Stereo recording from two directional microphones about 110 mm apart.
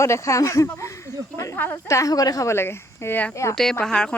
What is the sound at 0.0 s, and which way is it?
Speech, 30° left (ahead or behind).